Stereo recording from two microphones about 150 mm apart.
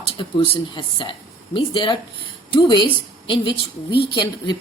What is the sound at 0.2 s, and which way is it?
A woman's voice, 35° left (ahead or behind).